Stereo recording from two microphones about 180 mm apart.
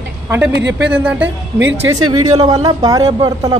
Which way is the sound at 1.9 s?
25° right (ahead or behind).